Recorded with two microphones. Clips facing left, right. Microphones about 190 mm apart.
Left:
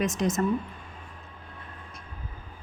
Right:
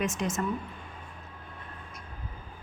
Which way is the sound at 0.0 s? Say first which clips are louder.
Left 4 dB; 40° left (ahead or behind).